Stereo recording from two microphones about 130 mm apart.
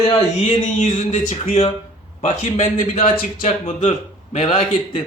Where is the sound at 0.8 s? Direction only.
70° left (ahead or behind).